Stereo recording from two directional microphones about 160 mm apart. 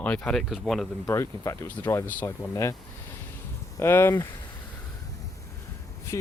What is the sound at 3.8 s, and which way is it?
Speech, 15° left (ahead or behind).